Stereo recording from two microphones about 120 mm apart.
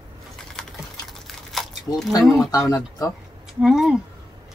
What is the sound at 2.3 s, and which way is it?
Speech, 25° left (ahead or behind).